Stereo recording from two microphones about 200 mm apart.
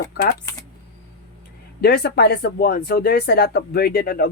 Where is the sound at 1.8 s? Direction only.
55° left (ahead or behind).